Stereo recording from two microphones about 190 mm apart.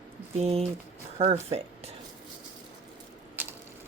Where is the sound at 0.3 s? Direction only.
35° right (ahead or behind).